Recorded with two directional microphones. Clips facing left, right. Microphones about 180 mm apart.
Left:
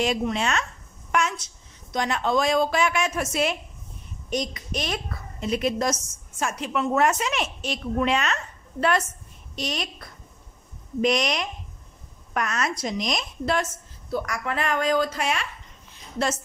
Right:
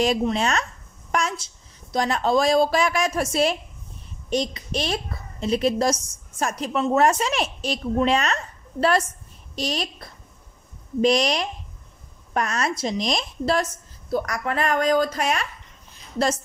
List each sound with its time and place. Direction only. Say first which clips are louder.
0.0 s a woman's voice: right 3 dB; 35° right (ahead or behind)
9.6 s a woman's voice: right 3 dB; 35° right (ahead or behind)